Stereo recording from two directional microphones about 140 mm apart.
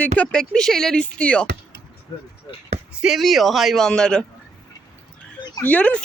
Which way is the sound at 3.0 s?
Centre (ahead or behind).